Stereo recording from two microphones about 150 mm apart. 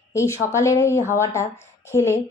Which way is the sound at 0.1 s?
20° left (ahead or behind).